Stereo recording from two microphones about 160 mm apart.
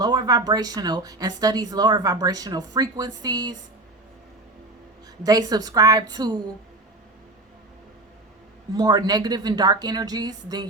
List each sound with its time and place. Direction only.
0.0 s speech: 25° right (ahead or behind)
5.2 s speech: 25° right (ahead or behind)
8.7 s speech: 25° right (ahead or behind)